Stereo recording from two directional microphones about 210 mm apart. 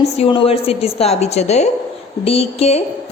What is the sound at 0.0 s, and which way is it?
A woman's voice, 25° left (ahead or behind).